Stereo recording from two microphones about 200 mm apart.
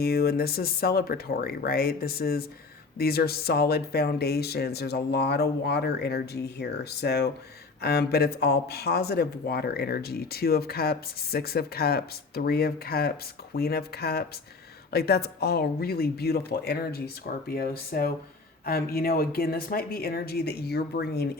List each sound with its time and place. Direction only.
0.0 s speech: 50° left (ahead or behind)